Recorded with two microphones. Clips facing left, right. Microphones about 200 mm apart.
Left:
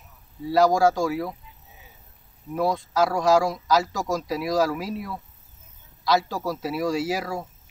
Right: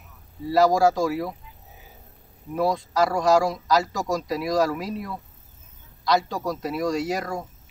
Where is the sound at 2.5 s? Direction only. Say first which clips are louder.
Even; centre (ahead or behind).